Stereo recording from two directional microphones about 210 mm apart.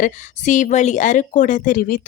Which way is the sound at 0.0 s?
35° left (ahead or behind).